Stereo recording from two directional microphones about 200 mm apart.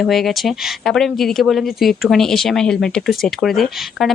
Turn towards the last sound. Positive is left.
turn(degrees=0)  # may be behind; listen again after turning